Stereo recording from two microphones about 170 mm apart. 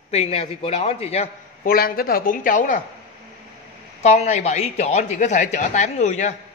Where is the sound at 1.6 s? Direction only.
60° left (ahead or behind).